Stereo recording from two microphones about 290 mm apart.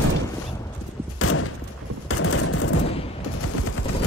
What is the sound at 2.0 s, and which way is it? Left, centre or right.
Machine gun, left.